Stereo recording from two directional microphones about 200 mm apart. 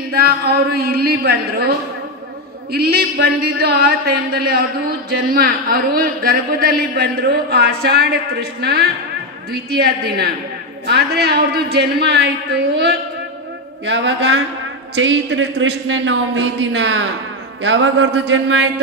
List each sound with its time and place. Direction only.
0.1 s a man's voice: 50° right (ahead or behind)
2.7 s a man's voice: 50° right (ahead or behind)